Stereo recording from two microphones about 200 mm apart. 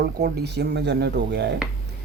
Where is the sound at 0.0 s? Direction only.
55° right (ahead or behind).